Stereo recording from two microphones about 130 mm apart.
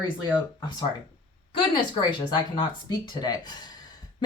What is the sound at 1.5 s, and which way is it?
Speech, 35° left (ahead or behind).